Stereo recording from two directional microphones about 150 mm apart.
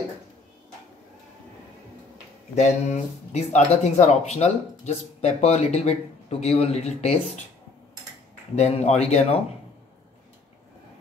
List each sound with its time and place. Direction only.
2.5 s speech: 50° left (ahead or behind)
8.5 s speech: 45° left (ahead or behind)